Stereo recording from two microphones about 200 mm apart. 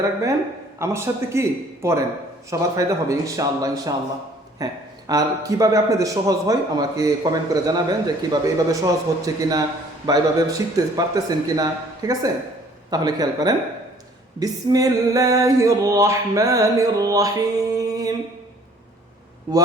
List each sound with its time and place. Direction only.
0.8 s speech: 15° right (ahead or behind)